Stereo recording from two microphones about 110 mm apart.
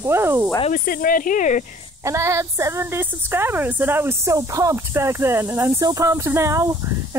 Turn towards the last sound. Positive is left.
turn(degrees=-25)  # may be behind; listen again after turning